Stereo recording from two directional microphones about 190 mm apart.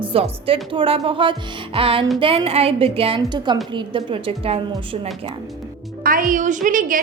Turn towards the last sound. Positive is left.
turn(degrees=-45)  # may be behind; listen again after turning